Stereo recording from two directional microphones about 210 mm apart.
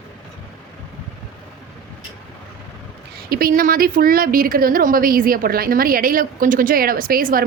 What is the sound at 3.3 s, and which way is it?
Speech, 45° right (ahead or behind).